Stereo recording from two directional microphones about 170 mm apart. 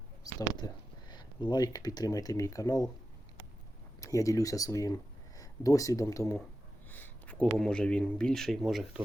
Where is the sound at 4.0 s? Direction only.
20° left (ahead or behind).